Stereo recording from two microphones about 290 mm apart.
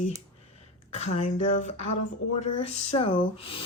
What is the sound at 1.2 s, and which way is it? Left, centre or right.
Speech, left.